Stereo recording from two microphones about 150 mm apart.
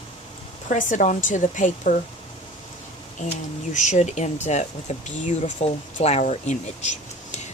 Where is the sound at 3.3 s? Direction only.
50° left (ahead or behind).